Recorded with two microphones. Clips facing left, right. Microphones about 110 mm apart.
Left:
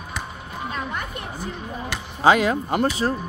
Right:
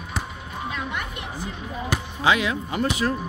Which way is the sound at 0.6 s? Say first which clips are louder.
Left 1 dB; 40° left (ahead or behind).